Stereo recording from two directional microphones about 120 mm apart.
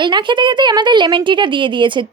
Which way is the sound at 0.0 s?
40° right (ahead or behind).